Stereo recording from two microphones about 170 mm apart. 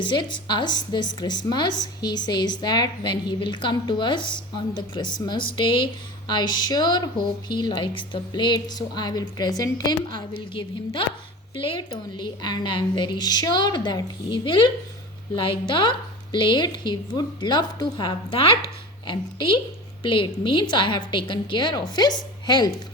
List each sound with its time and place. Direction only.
0.0 s a woman's voice: 25° left (ahead or behind)